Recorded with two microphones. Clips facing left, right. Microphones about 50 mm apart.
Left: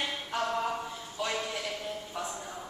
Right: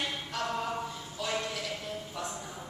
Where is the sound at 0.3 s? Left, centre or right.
Centre.